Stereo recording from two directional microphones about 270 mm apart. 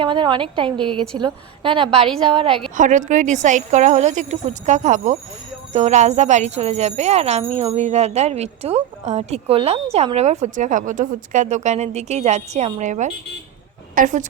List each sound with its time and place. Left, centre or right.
0.0 s a woman's voice: centre